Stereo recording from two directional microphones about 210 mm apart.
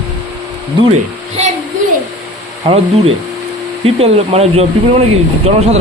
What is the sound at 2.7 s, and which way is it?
Speech, 30° right (ahead or behind).